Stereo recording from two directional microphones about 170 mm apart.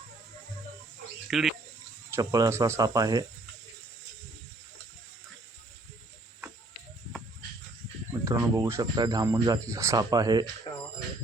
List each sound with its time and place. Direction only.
1.3 s speech: centre (ahead or behind)
2.1 s speech: 20° right (ahead or behind)
8.2 s speech: 20° right (ahead or behind)